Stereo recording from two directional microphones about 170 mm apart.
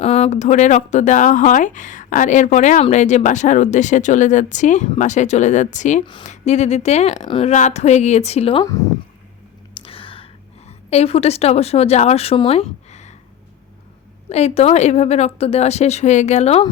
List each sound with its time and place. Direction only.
0.0 s a woman's voice: 40° left (ahead or behind)
7.3 s a woman's voice: 30° left (ahead or behind)
7.5 s a woman's voice: 45° left (ahead or behind)
9.8 s a sound: 30° left (ahead or behind)
10.7 s a woman's voice: 40° left (ahead or behind)
14.3 s a woman's voice: 40° left (ahead or behind)